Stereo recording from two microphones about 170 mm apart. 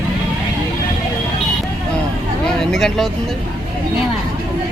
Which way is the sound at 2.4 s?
5° left (ahead or behind).